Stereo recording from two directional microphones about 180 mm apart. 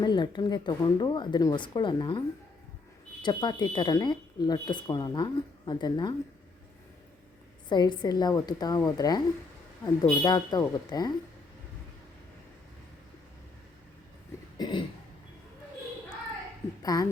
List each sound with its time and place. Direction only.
0.0 s speech: 25° left (ahead or behind)
7.7 s speech: 25° left (ahead or behind)
14.6 s a sound: 25° left (ahead or behind)
16.8 s a woman's voice: 20° left (ahead or behind)